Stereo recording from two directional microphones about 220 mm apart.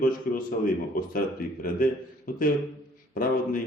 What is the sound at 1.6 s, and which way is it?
Speech, 40° left (ahead or behind).